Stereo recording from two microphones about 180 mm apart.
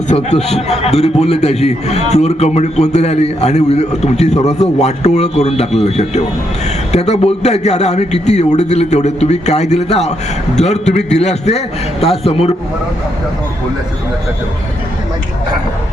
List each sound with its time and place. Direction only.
0.1 s a man's voice: 40° left (ahead or behind)